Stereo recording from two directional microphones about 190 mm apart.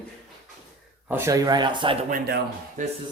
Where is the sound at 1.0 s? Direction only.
10° right (ahead or behind).